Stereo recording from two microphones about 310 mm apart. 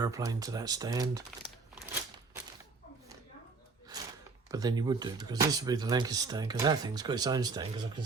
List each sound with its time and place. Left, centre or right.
0.0 s speech: centre
3.9 s a sound: centre
4.5 s speech: centre